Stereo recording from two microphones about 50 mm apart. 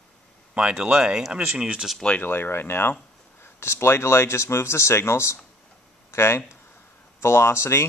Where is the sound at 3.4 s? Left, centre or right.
Left.